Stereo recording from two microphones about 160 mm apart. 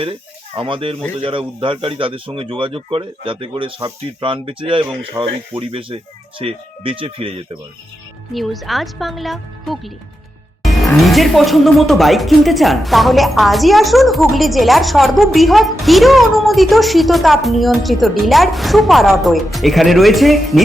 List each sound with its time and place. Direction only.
0.0 s speech: 35° right (ahead or behind)
8.3 s speech: centre (ahead or behind)